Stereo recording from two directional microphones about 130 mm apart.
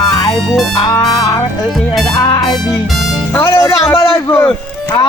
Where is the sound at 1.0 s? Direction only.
30° left (ahead or behind).